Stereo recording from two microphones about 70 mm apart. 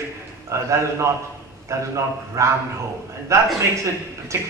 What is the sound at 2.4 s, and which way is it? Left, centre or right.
A man's voice, right.